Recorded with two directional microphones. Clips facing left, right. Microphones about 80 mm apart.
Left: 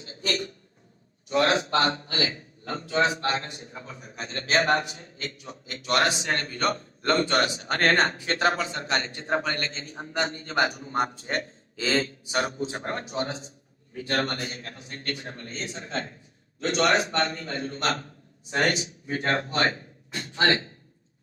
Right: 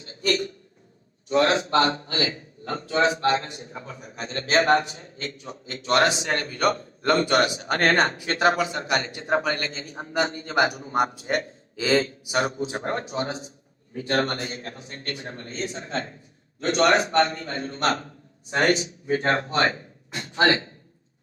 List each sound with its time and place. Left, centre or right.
0.0 s hiccup: right
1.3 s a man's voice: right
12.8 s a man's voice: right
13.9 s a man's voice: right